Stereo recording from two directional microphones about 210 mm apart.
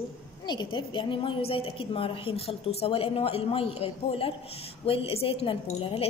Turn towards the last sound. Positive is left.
turn(degrees=25)  # may be behind; listen again after turning